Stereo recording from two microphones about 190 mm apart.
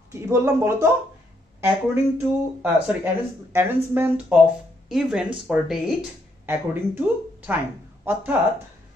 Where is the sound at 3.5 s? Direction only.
10° right (ahead or behind).